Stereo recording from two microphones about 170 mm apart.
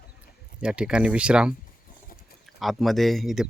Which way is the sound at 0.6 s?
5° right (ahead or behind).